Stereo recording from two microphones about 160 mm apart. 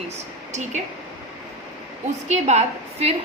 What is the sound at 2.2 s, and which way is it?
Speech, 45° right (ahead or behind).